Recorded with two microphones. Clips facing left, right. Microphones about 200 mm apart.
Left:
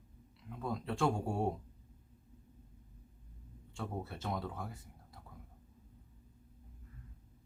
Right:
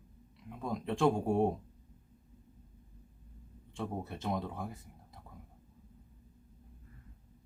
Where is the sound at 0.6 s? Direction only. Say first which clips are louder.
Right 4 dB; 15° right (ahead or behind).